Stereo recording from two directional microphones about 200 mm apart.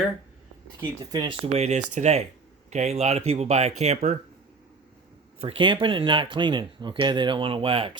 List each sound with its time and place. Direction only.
1.1 s speech: 20° right (ahead or behind)
1.5 s speech: 35° right (ahead or behind)
5.4 s speech: 25° right (ahead or behind)